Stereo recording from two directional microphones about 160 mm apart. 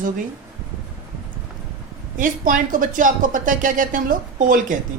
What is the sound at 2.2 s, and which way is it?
Speech, 55° right (ahead or behind).